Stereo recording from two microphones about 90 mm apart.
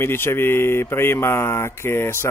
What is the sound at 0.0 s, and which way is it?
Speech, 25° left (ahead or behind).